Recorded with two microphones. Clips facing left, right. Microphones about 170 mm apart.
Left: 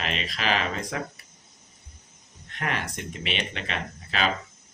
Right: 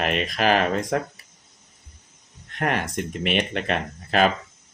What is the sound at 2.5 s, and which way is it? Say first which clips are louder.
Speech: right 6 dB; 50° right (ahead or behind).